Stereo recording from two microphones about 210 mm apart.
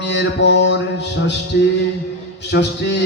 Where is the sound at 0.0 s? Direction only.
55° left (ahead or behind).